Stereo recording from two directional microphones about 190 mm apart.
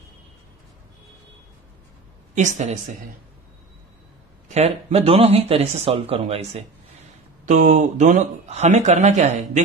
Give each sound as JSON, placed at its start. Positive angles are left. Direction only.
{"t": 2.3, "sound": "speech", "side_deg": -40}
{"t": 4.5, "sound": "speech", "side_deg": -35}